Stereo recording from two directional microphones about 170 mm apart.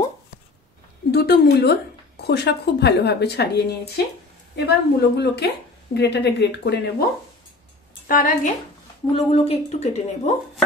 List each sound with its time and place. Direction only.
1.1 s a woman's voice: 70° left (ahead or behind); by 7.1 s 85° left
8.1 s a woman's voice: 50° left (ahead or behind)
9.1 s a woman's voice: 35° left (ahead or behind)